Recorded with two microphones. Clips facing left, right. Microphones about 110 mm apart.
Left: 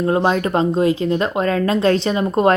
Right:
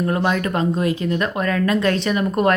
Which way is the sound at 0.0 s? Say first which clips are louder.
Left 3 dB; 25° left (ahead or behind).